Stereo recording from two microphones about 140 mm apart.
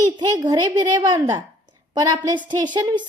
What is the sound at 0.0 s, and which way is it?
A woman's voice, 25° right (ahead or behind).